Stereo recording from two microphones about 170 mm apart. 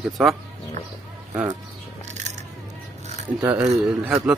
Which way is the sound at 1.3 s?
20° right (ahead or behind).